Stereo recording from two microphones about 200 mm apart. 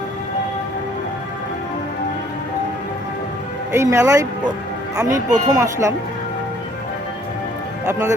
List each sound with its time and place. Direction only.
3.7 s speech: 15° right (ahead or behind)
7.9 s speech: 15° right (ahead or behind)